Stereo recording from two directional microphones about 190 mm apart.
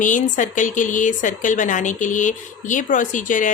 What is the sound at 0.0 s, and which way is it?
A woman's voice, 40° left (ahead or behind).